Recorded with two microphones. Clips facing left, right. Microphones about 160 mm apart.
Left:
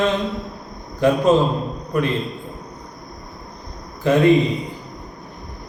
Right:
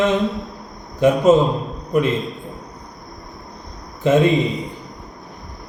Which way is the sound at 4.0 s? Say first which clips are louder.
Even; 20° right (ahead or behind).